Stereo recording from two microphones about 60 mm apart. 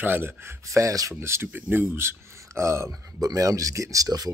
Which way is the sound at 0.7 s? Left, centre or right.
Right.